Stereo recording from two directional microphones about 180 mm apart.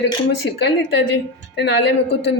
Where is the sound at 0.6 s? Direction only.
70° left (ahead or behind).